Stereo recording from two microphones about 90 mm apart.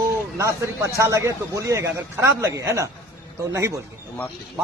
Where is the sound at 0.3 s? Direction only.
35° right (ahead or behind).